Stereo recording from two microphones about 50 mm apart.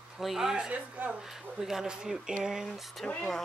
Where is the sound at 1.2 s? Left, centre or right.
Centre.